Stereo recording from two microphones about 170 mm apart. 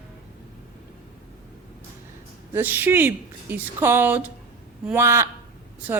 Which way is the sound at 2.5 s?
10° right (ahead or behind).